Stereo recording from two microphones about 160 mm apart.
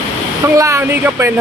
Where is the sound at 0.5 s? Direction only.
15° right (ahead or behind).